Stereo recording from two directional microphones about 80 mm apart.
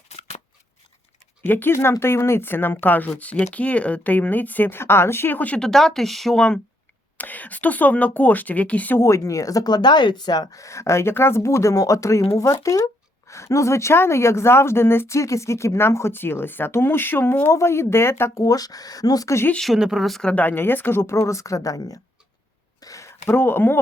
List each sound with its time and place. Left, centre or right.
1.4 s speech: left
5.5 s speech: centre
7.2 s speech: left
9.0 s speech: left
18.4 s speech: left
19.5 s speech: centre
20.2 s speech: centre; by 21.9 s left
22.8 s a sound: left
23.2 s speech: left